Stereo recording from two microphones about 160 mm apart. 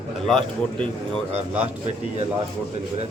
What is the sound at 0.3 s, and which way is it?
Speech, centre (ahead or behind).